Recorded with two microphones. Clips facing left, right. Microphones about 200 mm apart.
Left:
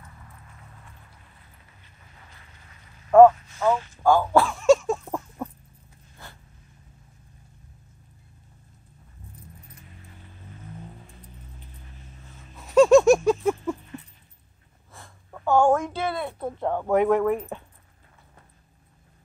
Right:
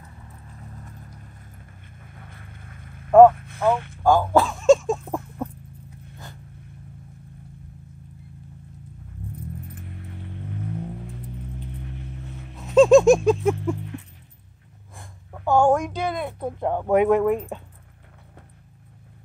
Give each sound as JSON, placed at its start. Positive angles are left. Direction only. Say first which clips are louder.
{"t": 0.3, "sound": "vehicle", "louder": "right 7 dB", "side_deg": -35}
{"t": 3.3, "sound": "speech", "louder": "right 1 dB", "side_deg": -55}
{"t": 4.0, "sound": "speech", "louder": "right 1 dB", "side_deg": -15}
{"t": 5.0, "sound": "a sound", "louder": "right 3 dB", "side_deg": -5}
{"t": 9.8, "sound": "music", "louder": "right 11 dB", "side_deg": -65}
{"t": 12.7, "sound": "a sound", "louder": "right 2 dB", "side_deg": -15}
{"t": 13.7, "sound": "music", "louder": "right 5 dB", "side_deg": -70}
{"t": 15.0, "sound": "speech", "louder": "right 2 dB", "side_deg": -15}